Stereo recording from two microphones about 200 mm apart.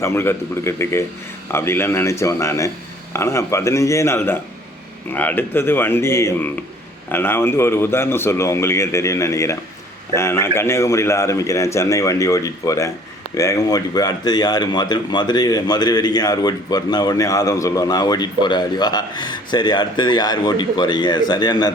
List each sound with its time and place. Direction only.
0.0 s a man's voice: 10° left (ahead or behind)